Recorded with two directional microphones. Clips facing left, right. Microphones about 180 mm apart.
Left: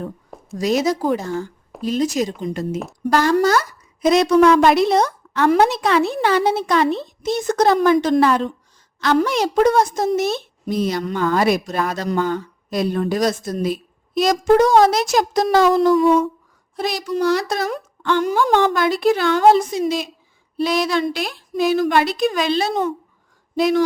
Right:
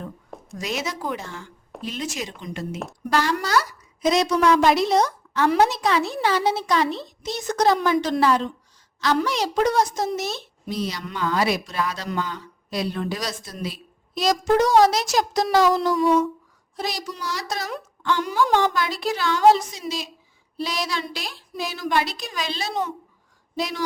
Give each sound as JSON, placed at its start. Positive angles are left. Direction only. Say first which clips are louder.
{"t": 0.5, "sound": "a woman's voice", "louder": "left 11 dB", "side_deg": 40}